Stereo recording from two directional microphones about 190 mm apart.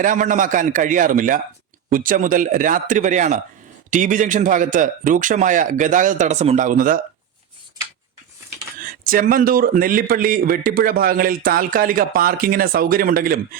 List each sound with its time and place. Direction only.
0.0 s speech: 45° right (ahead or behind)
9.0 s speech: 45° right (ahead or behind)